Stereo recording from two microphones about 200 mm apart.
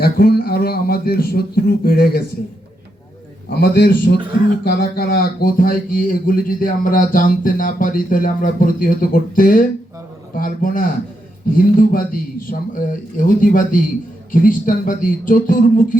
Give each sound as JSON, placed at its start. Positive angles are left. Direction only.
{"t": 0.0, "sound": "speech", "side_deg": 50}
{"t": 3.6, "sound": "speech", "side_deg": 50}